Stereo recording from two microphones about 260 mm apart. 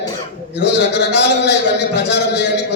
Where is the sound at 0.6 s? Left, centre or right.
Left.